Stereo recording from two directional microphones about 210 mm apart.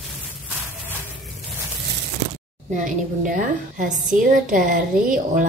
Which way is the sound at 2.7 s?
40° right (ahead or behind).